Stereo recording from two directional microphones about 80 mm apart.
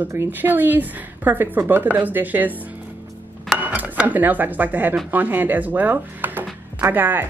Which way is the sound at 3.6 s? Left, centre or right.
Right.